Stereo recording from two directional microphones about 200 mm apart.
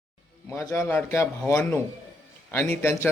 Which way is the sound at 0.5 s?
15° left (ahead or behind).